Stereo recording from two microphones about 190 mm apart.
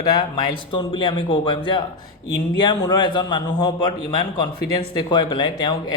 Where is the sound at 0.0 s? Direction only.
20° left (ahead or behind).